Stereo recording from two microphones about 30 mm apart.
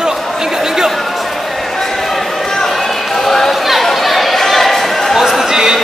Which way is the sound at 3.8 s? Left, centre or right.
Centre.